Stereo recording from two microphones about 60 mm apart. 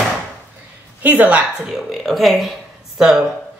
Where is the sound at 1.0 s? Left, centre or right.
Right.